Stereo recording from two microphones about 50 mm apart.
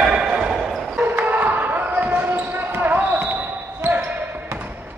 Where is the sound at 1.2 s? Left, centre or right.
Right.